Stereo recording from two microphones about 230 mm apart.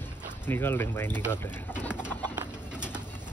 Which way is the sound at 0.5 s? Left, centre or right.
Centre.